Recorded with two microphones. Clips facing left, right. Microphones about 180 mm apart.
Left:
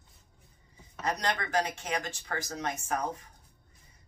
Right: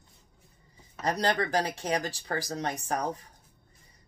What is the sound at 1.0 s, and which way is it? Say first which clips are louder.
Speech: right 4 dB; 35° right (ahead or behind).